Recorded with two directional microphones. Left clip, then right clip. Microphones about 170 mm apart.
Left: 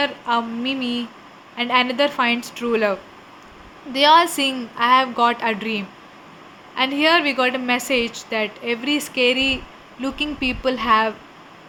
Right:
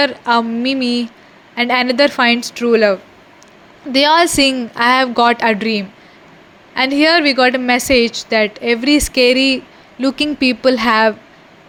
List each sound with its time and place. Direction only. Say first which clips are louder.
0.0 s a woman's voice: right 7 dB; 40° right (ahead or behind)
3.9 s a woman's voice: right 3 dB; 45° right (ahead or behind)